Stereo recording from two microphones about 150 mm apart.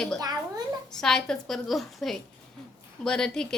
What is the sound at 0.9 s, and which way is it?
A woman's voice, 5° left (ahead or behind).